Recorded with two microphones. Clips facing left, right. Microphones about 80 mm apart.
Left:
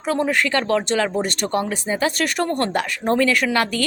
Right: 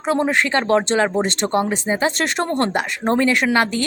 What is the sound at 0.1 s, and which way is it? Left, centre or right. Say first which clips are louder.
Speech: right 2 dB; right.